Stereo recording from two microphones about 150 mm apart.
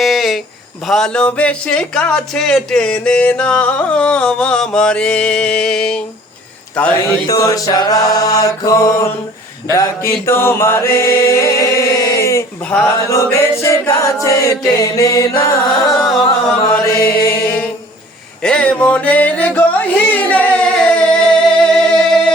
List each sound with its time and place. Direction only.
0.0 s a sound: centre (ahead or behind)
0.9 s speech: 5° left (ahead or behind)
7.3 s mantra: 20° left (ahead or behind)
13.1 s chant: 20° left (ahead or behind)
15.4 s mantra: 20° left (ahead or behind)
17.2 s music: 15° left (ahead or behind)